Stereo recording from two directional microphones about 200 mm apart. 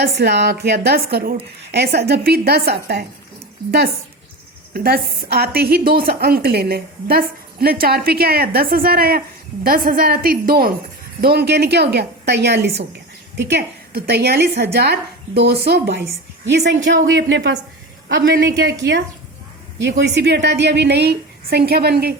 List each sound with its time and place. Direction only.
0.0 s a woman's voice: 55° right (ahead or behind)
4.7 s a woman's voice: 50° right (ahead or behind)
19.8 s a woman's voice: 60° right (ahead or behind)